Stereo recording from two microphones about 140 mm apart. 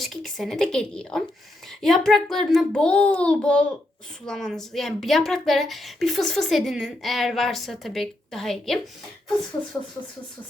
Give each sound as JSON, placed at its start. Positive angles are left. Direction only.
{"t": 0.0, "sound": "a child's voice", "side_deg": 0}